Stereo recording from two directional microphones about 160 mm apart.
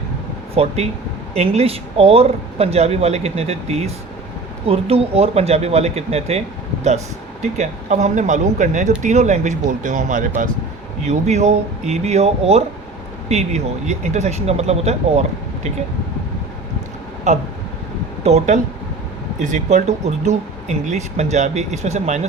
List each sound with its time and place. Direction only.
0.5 s speech: 40° right (ahead or behind)
7.4 s speech: 45° right (ahead or behind)
11.0 s speech: 45° right (ahead or behind)
17.3 s speech: 45° right (ahead or behind)